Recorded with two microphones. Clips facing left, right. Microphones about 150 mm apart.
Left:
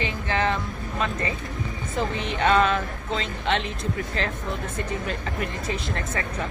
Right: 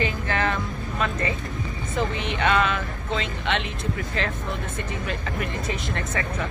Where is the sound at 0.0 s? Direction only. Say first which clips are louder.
Even; 25° left (ahead or behind).